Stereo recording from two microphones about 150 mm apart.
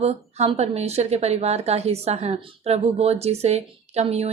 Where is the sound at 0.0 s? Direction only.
45° right (ahead or behind).